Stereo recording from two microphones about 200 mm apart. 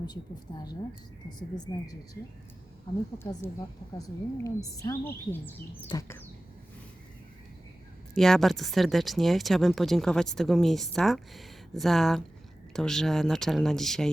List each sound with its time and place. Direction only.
0.5 s a woman's voice: 20° left (ahead or behind)
3.9 s speech: 20° left (ahead or behind)
8.1 s speech: centre (ahead or behind)